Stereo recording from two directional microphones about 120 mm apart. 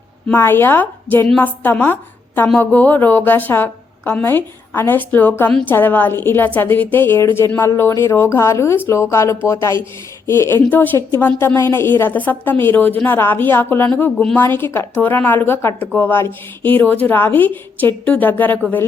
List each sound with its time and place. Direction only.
0.3 s a woman's voice: 20° left (ahead or behind)